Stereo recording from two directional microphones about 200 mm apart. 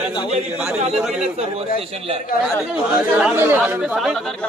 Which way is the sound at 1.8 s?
30° right (ahead or behind).